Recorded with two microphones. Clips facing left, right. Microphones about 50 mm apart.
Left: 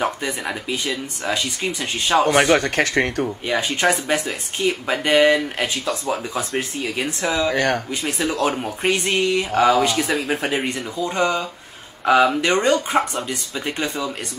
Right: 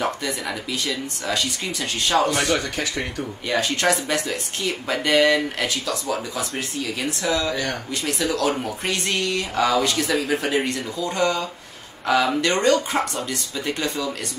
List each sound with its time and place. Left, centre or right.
0.0 s speech: left
2.5 s speech: left
3.4 s speech: left
7.5 s speech: left
7.9 s speech: left
9.5 s speech: left